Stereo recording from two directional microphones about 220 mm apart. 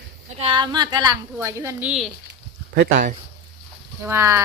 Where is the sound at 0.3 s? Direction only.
25° right (ahead or behind); by 2.1 s centre (ahead or behind).